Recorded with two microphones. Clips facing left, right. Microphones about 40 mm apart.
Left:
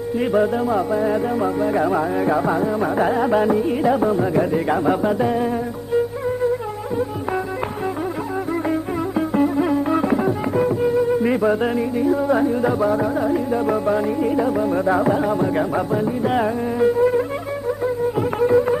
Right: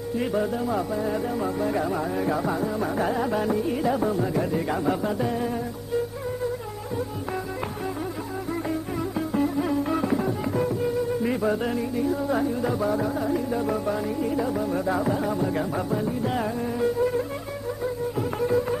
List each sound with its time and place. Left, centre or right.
0.2 s music: left
9.3 s music: left
18.4 s music: left